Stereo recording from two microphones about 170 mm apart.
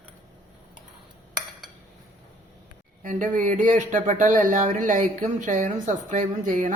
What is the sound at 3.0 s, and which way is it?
Speech, 50° right (ahead or behind).